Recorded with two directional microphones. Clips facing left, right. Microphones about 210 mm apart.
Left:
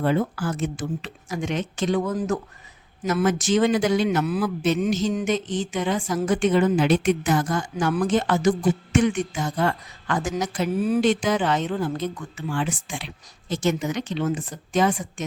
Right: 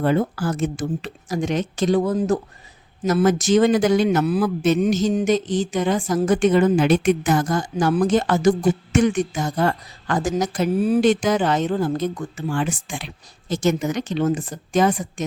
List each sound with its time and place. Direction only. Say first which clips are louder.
0.0 s a woman's voice: right 3 dB; 45° right (ahead or behind)